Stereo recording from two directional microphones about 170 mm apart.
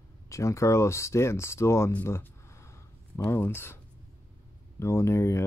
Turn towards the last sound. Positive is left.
turn(degrees=15)  # may be behind; listen again after turning